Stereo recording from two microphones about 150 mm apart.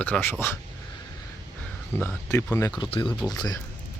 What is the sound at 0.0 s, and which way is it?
Speech, 15° left (ahead or behind).